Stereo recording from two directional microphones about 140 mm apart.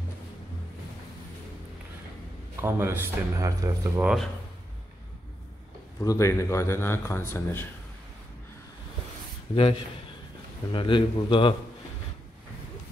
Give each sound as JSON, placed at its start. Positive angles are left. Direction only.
{"t": 2.6, "sound": "speech", "side_deg": -15}
{"t": 4.0, "sound": "speech", "side_deg": -5}
{"t": 5.9, "sound": "speech", "side_deg": 20}
{"t": 9.6, "sound": "a man's voice", "side_deg": 40}